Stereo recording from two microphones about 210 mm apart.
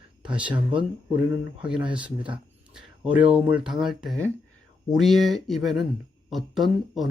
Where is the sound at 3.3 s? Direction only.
5° right (ahead or behind).